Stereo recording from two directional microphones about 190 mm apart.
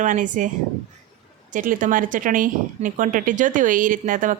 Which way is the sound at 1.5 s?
45° right (ahead or behind).